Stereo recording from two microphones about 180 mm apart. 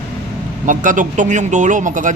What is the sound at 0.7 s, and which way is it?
Speech, 45° right (ahead or behind).